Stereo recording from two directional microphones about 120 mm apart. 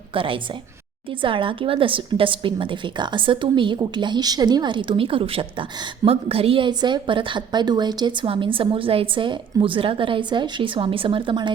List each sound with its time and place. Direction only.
0.1 s a woman's voice: 45° right (ahead or behind)